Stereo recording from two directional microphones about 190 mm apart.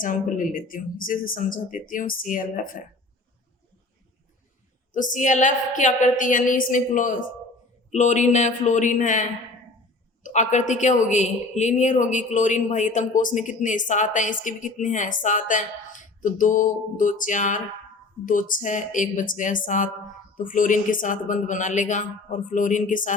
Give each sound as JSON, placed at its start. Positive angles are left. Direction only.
{"t": 0.0, "sound": "speech", "side_deg": 45}
{"t": 4.9, "sound": "speech", "side_deg": 40}
{"t": 10.2, "sound": "speech", "side_deg": 40}